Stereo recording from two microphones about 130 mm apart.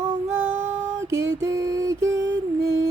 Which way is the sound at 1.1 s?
25° right (ahead or behind).